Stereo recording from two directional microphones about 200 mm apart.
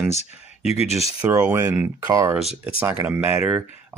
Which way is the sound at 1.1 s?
15° right (ahead or behind).